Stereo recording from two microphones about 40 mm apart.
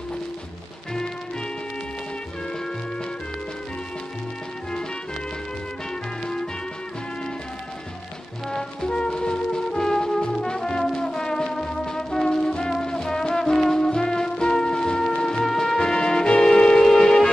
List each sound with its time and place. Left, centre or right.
8.5 s music: centre
15.4 s music: centre